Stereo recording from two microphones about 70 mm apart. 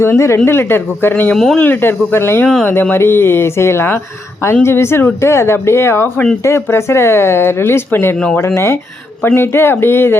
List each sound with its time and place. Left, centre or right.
0.0 s speech: left
1.3 s speech: centre
1.5 s speech: left
8.5 s speech: left